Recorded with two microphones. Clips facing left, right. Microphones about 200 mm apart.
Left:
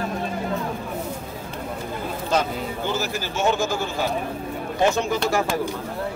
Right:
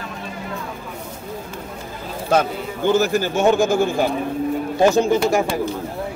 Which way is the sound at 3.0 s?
50° right (ahead or behind).